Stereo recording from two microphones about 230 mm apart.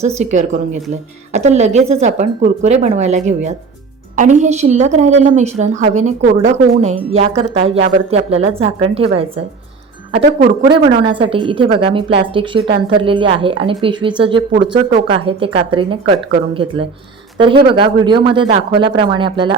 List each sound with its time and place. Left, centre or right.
0.0 s a woman's voice: right
17.3 s speech: right